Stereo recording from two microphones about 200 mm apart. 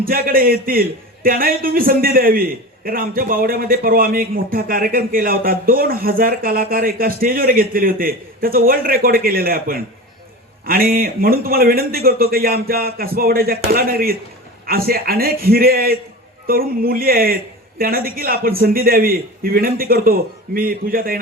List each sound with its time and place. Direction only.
0.0 s a man's voice: 45° right (ahead or behind)